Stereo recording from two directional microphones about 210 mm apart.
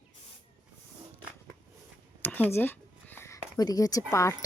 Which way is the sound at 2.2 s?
10° left (ahead or behind).